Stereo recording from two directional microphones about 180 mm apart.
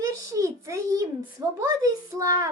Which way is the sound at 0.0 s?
15° right (ahead or behind).